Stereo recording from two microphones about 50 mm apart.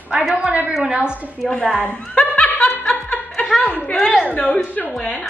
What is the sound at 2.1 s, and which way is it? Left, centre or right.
Laughter, left.